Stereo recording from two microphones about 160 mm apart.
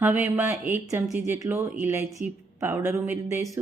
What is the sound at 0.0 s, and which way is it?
A woman's voice, 10° right (ahead or behind).